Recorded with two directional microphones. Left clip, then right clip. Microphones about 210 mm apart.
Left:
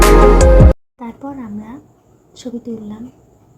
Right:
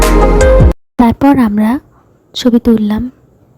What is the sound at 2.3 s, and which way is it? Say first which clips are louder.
Speech: right 17 dB; 45° right (ahead or behind).